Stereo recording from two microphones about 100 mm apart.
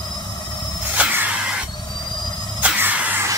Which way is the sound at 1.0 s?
15° right (ahead or behind).